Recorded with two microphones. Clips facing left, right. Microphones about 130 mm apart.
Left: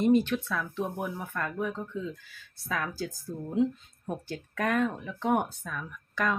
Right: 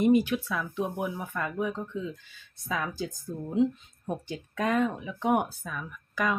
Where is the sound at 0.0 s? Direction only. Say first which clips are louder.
Right 1 dB; 10° right (ahead or behind).